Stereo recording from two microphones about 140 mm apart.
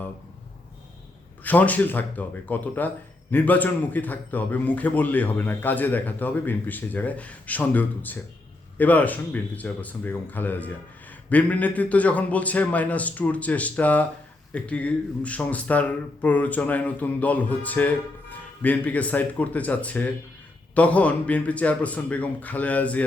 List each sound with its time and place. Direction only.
1.5 s speech: 10° left (ahead or behind)